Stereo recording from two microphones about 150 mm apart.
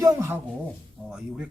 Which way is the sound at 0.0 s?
20° right (ahead or behind).